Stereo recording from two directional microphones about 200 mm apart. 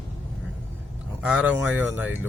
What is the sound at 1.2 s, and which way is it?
Speech, 5° right (ahead or behind).